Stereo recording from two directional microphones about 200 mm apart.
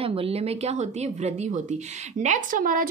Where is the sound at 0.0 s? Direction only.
30° right (ahead or behind).